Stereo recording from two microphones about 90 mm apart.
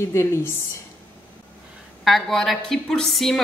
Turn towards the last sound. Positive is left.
turn(degrees=5)  # may be behind; listen again after turning